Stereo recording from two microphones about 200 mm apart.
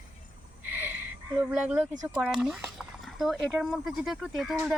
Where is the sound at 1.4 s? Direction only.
5° right (ahead or behind).